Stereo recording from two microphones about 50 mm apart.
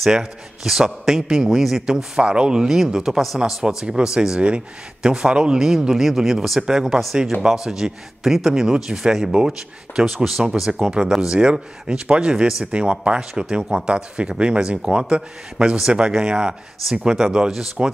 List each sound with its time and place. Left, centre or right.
0.0 s a man's voice: centre
2.2 s a man's voice: right; by 3.3 s centre
3.6 s a man's voice: centre
5.9 s a man's voice: centre
10.4 s a man's voice: centre
12.7 s a man's voice: right